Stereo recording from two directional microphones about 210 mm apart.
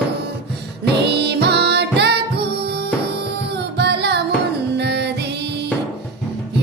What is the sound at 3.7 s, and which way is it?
Music, 55° right (ahead or behind).